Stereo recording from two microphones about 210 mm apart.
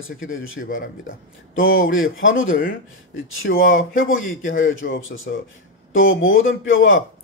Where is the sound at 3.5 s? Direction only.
45° left (ahead or behind).